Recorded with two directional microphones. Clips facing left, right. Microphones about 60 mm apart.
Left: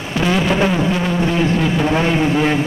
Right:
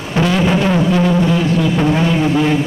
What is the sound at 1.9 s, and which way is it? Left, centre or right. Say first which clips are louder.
Speech: right 1 dB; centre.